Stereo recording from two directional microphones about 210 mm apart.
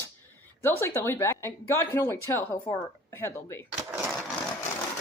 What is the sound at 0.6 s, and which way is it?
Speech, 10° left (ahead or behind).